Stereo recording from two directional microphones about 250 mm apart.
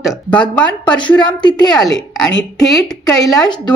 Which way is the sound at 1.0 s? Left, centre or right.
Centre.